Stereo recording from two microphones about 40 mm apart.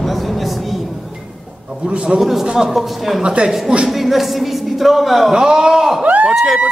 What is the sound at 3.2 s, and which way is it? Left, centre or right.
Speech, right.